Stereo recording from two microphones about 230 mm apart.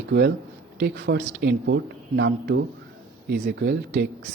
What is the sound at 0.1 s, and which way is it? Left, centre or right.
Speech, right.